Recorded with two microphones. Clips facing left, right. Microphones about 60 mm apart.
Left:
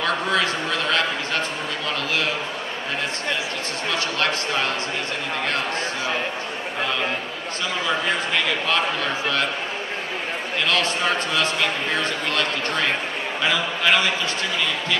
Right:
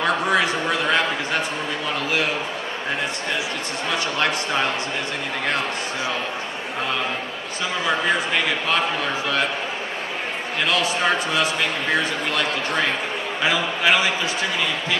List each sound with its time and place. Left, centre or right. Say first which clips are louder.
0.0 s a man's voice: right 2 dB; centre
3.9 s a man's voice: right 1 dB; centre
8.6 s a man's voice: even; centre
10.7 s a man's voice: right 2 dB; centre